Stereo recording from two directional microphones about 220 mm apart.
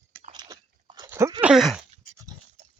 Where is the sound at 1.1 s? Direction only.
15° right (ahead or behind).